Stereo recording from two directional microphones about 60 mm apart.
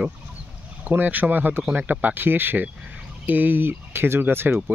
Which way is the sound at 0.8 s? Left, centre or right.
Right.